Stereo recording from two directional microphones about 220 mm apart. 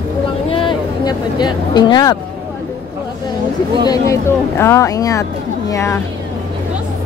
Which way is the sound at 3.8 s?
15° left (ahead or behind).